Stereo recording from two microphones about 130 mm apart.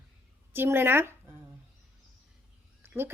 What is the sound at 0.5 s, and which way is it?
Speech, 15° right (ahead or behind).